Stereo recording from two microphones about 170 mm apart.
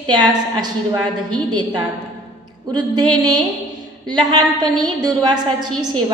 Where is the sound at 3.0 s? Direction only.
25° right (ahead or behind).